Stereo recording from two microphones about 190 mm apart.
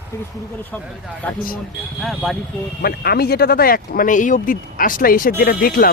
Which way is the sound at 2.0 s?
Centre (ahead or behind).